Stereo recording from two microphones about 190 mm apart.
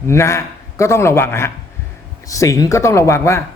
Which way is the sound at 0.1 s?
15° left (ahead or behind).